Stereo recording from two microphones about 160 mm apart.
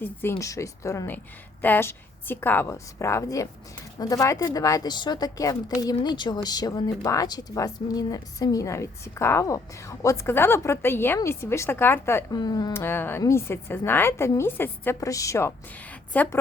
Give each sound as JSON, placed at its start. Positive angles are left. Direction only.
{"t": 0.0, "sound": "a woman's voice", "side_deg": 15}
{"t": 12.4, "sound": "speech", "side_deg": 25}
{"t": 12.7, "sound": "a woman's voice", "side_deg": 15}